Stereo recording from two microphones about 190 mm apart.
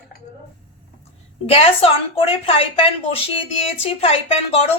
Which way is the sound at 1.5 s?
30° left (ahead or behind).